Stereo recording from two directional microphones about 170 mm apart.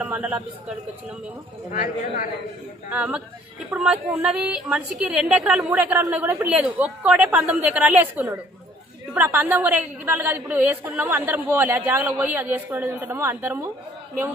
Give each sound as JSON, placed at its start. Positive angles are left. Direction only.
{"t": 0.0, "sound": "a woman's voice", "side_deg": -5}
{"t": 2.9, "sound": "a woman's voice", "side_deg": -10}